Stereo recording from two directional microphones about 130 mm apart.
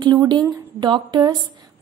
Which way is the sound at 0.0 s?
35° right (ahead or behind).